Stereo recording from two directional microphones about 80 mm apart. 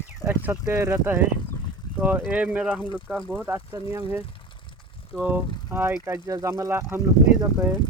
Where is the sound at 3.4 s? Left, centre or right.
Right.